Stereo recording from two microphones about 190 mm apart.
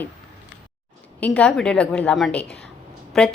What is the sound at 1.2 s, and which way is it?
A woman's voice, 5° left (ahead or behind).